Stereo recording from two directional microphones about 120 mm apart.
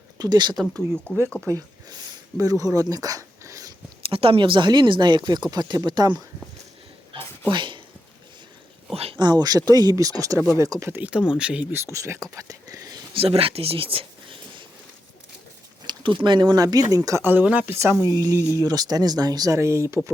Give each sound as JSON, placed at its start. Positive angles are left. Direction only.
{"t": 0.2, "sound": "speech", "side_deg": -35}
{"t": 0.8, "sound": "speech", "side_deg": 10}
{"t": 1.5, "sound": "speech", "side_deg": -35}
{"t": 2.9, "sound": "a sound", "side_deg": -30}
{"t": 4.1, "sound": "speech", "side_deg": -50}
{"t": 7.5, "sound": "speech", "side_deg": -40}
{"t": 9.1, "sound": "speech", "side_deg": -35}
{"t": 11.9, "sound": "speech", "side_deg": -25}
{"t": 13.1, "sound": "speech", "side_deg": -55}
{"t": 15.9, "sound": "speech", "side_deg": -40}
{"t": 17.7, "sound": "speech", "side_deg": -20}